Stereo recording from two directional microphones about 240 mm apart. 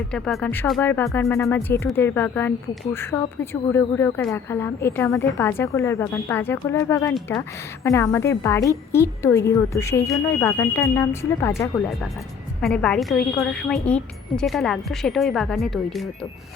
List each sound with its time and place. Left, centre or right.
0.1 s speech: centre
7.1 s a woman's voice: centre
7.9 s speech: centre
12.6 s a woman's voice: centre